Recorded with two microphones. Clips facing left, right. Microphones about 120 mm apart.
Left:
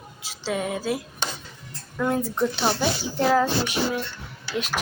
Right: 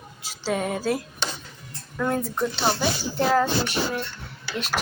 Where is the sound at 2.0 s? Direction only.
10° left (ahead or behind).